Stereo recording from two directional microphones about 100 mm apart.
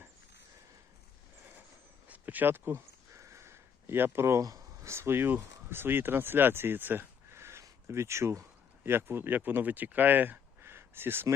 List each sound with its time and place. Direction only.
2.0 s speech: 15° right (ahead or behind)